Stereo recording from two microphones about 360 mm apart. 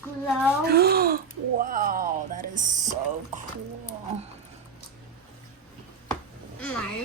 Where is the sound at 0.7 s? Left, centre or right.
Right.